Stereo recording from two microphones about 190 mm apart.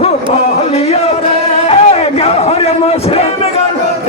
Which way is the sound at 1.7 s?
30° left (ahead or behind).